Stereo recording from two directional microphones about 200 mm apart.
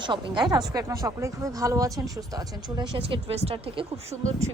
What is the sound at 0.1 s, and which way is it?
A woman's voice, 20° right (ahead or behind).